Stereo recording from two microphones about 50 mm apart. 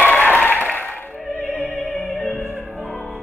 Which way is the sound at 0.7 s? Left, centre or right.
Left.